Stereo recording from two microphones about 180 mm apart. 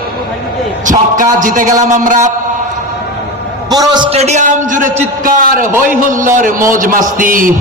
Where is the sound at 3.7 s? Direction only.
25° right (ahead or behind).